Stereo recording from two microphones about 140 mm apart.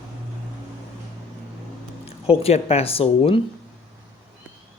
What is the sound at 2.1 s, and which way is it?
Speech, 45° left (ahead or behind).